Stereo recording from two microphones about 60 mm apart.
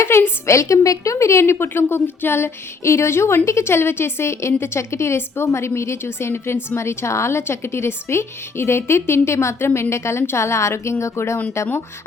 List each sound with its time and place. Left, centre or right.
0.0 s a woman's voice: left